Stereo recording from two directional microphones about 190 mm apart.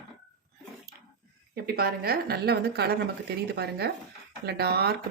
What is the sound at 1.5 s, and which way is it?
A woman's voice, 55° right (ahead or behind).